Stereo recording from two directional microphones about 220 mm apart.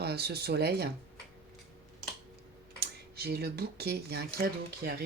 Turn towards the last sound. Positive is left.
turn(degrees=-45)  # may be behind; listen again after turning